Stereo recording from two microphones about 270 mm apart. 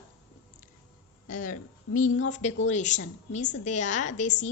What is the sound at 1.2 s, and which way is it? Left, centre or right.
A woman's voice, left.